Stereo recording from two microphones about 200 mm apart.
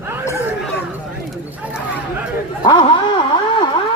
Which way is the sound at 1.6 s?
5° right (ahead or behind).